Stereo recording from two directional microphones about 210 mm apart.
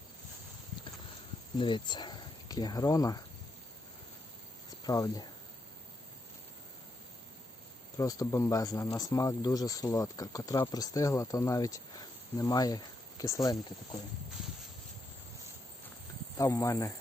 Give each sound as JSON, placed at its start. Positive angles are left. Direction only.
{"t": 1.5, "sound": "speech", "side_deg": 25}
{"t": 4.8, "sound": "speech", "side_deg": 15}
{"t": 7.9, "sound": "speech", "side_deg": 15}
{"t": 16.4, "sound": "speech", "side_deg": 15}